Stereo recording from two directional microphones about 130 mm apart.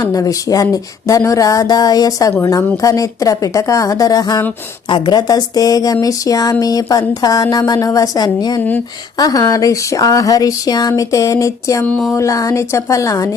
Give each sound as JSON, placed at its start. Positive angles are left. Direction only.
{"t": 0.0, "sound": "speech", "side_deg": 25}
{"t": 11.9, "sound": "speech", "side_deg": 5}
{"t": 12.1, "sound": "speech", "side_deg": 25}